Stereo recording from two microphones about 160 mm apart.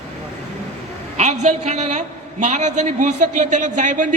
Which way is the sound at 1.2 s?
45° right (ahead or behind).